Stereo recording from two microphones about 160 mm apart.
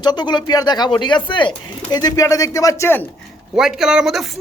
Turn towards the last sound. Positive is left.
turn(degrees=-5)  # may be behind; listen again after turning